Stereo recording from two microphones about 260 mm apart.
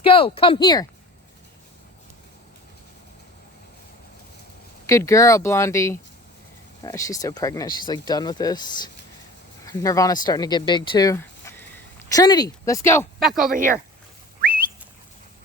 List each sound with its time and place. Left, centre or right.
0.0 s speech: left
4.9 s speech: centre
13.1 s speech: centre
13.5 s speech: right